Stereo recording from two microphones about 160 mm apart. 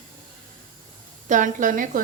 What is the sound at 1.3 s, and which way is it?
Speech, 55° right (ahead or behind).